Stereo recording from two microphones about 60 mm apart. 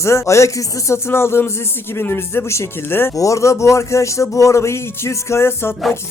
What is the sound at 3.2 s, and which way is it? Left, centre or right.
Speech, left.